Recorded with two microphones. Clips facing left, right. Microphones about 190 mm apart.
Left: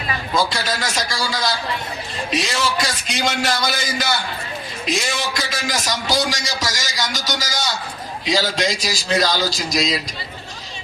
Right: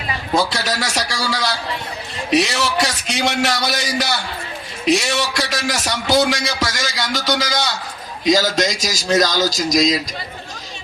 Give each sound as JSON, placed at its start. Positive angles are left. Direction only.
{"t": 0.3, "sound": "a man's voice", "side_deg": -70}
{"t": 8.2, "sound": "a man's voice", "side_deg": -45}